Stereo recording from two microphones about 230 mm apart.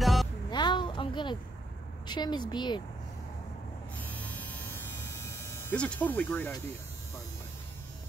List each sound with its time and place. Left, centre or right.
0.0 s music: centre
0.5 s a sound: centre
2.0 s a woman's voice: centre
4.0 s hum: centre